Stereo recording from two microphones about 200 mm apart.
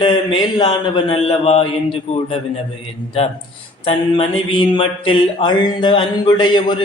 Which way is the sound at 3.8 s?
30° left (ahead or behind).